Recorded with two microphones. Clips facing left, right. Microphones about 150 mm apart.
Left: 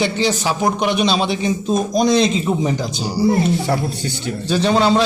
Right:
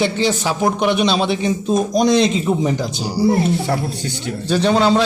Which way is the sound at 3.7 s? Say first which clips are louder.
Left 1 dB; 5° left (ahead or behind).